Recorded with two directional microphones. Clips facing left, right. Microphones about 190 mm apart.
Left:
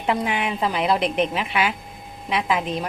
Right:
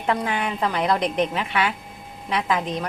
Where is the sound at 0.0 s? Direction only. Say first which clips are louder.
Left 1 dB; 15° left (ahead or behind).